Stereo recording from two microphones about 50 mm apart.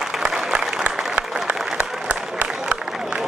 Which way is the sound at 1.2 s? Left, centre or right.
Right.